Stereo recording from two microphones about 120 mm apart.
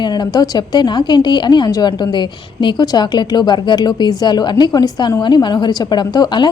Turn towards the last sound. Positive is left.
turn(degrees=35)  # may be behind; listen again after turning